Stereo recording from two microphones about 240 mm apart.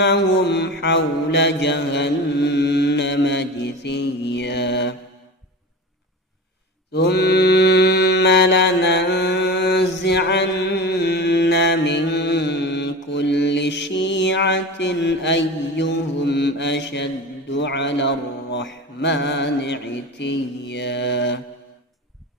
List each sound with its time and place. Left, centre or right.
0.0 s mantra: left
6.9 s mantra: left